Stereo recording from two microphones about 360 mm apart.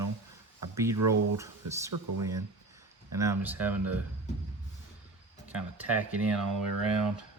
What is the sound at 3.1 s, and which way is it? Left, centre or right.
Speech, centre.